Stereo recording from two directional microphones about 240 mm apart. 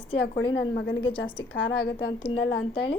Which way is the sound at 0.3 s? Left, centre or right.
Left.